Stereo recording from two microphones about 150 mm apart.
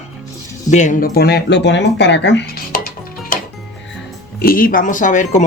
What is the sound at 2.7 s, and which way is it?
Music, 70° left (ahead or behind).